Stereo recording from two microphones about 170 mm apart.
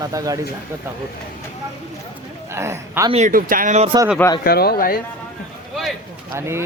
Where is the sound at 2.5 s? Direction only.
15° right (ahead or behind).